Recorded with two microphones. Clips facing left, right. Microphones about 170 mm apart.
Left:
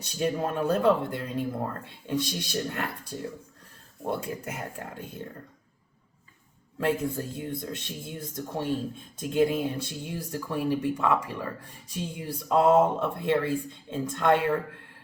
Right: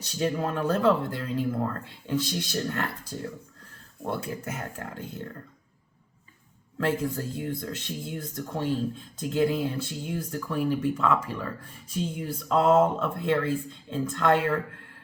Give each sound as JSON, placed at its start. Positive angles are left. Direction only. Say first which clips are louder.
{"t": 0.2, "sound": "speech", "louder": "even", "side_deg": 15}
{"t": 6.7, "sound": "speech", "louder": "even", "side_deg": 15}